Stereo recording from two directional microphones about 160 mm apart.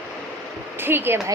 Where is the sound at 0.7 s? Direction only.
15° right (ahead or behind).